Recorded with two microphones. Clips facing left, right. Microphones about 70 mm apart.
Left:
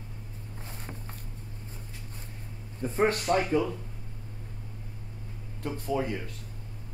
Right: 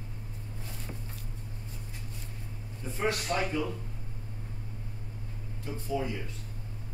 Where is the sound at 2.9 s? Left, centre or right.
Left.